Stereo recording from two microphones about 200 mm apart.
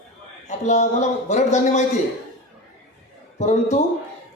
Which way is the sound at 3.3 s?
35° left (ahead or behind).